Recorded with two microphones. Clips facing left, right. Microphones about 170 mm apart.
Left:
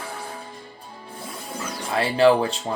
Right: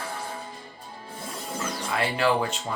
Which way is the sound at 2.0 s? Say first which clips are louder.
Left 7 dB; 30° left (ahead or behind).